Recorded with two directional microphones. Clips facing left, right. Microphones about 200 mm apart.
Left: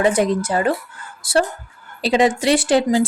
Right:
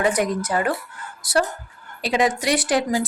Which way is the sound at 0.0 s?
25° left (ahead or behind).